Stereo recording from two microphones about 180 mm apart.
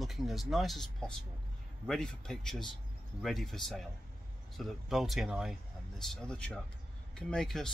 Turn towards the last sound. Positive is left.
turn(degrees=0)  # may be behind; listen again after turning